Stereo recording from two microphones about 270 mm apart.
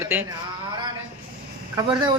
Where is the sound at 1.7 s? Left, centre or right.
Centre.